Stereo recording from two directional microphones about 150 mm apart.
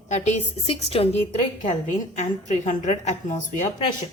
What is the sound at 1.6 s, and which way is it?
A woman's voice, 55° left (ahead or behind).